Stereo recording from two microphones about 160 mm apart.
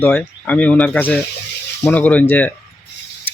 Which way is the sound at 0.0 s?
10° left (ahead or behind).